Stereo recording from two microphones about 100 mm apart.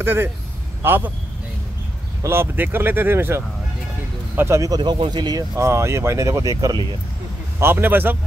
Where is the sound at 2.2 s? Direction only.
20° right (ahead or behind).